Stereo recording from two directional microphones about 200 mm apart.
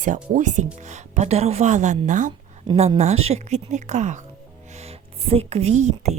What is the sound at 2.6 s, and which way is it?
A woman's voice, 30° right (ahead or behind).